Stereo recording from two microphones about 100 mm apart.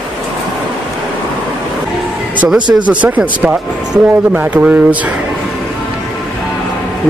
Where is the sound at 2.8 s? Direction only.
15° right (ahead or behind).